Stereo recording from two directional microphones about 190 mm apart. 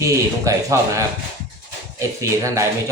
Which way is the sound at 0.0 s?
15° right (ahead or behind).